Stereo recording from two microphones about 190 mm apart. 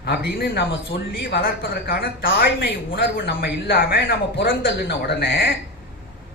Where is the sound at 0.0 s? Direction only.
60° left (ahead or behind).